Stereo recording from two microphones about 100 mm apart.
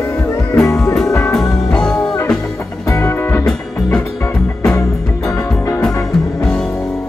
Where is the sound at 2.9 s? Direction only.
25° left (ahead or behind).